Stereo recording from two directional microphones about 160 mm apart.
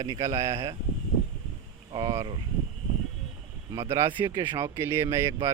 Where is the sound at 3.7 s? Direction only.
20° right (ahead or behind).